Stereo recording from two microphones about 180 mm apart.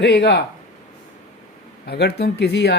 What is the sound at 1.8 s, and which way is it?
Speech, 65° left (ahead or behind).